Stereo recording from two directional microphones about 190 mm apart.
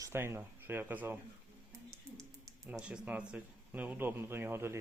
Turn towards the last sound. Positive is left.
turn(degrees=-15)  # may be behind; listen again after turning